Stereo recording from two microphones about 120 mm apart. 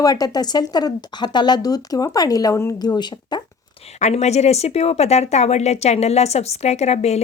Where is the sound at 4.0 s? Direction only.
70° left (ahead or behind).